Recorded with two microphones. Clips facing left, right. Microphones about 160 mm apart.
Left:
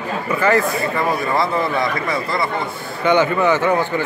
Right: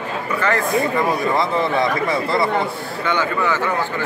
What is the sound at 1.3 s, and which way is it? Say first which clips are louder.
Speech: even; 25° right (ahead or behind).